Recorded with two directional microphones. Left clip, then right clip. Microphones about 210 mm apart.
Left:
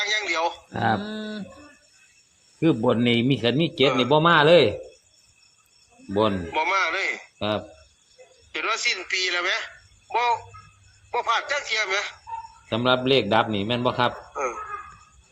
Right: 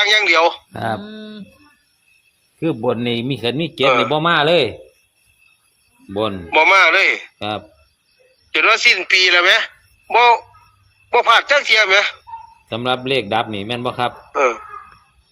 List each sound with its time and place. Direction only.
0.0 s speech: 40° right (ahead or behind)
0.7 s speech: 25° right (ahead or behind)
1.0 s speech: 30° left (ahead or behind)
2.6 s a man's voice: 30° right (ahead or behind)
6.1 s a man's voice: 35° right (ahead or behind)